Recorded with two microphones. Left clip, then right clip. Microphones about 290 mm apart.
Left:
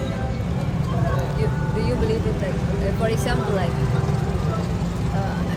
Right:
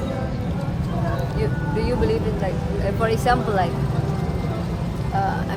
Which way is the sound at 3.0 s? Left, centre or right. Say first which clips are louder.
Right 6 dB; centre.